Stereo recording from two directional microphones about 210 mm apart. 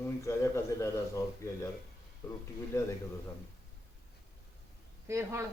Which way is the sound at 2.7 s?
15° left (ahead or behind).